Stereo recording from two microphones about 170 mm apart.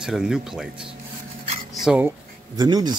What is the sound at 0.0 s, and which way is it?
Speech, 5° right (ahead or behind).